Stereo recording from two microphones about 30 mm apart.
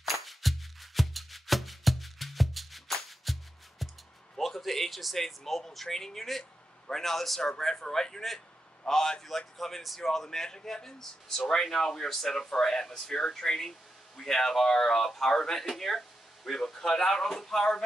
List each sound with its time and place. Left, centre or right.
0.0 s music: centre
4.4 s a sound: centre
5.1 s a man's voice: centre